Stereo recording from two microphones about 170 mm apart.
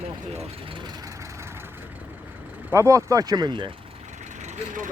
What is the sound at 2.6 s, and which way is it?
Speech, 15° right (ahead or behind).